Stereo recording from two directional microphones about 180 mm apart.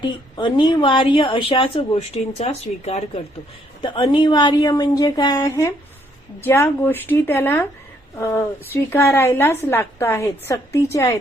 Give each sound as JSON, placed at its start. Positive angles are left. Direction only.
{"t": 0.0, "sound": "a woman's voice", "side_deg": 25}
{"t": 3.8, "sound": "a woman's voice", "side_deg": 25}